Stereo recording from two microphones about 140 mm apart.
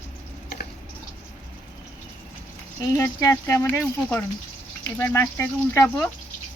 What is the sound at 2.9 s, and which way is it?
Speech, 20° left (ahead or behind).